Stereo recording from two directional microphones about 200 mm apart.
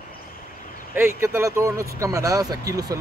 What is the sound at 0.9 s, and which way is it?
Speech, 10° right (ahead or behind).